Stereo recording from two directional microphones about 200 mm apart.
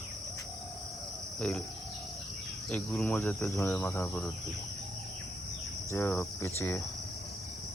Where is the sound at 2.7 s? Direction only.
5° left (ahead or behind).